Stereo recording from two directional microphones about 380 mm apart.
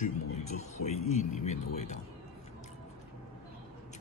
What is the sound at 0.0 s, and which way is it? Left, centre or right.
Speech, centre.